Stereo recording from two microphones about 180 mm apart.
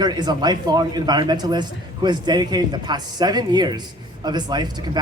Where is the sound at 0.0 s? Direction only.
25° right (ahead or behind).